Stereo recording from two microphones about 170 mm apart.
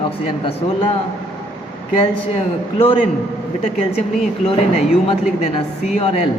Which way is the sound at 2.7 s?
35° left (ahead or behind).